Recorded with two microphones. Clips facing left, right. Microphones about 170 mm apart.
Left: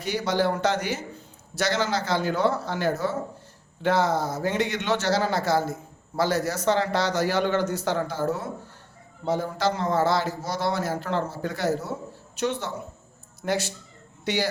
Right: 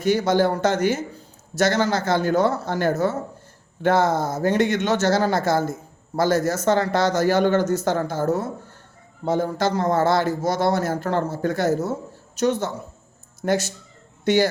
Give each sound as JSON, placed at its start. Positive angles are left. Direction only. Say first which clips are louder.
{"t": 0.0, "sound": "a man's voice", "louder": "right 6 dB", "side_deg": -50}